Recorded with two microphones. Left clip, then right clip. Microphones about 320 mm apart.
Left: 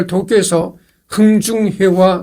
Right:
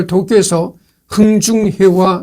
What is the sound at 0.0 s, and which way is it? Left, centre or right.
A man's voice, right.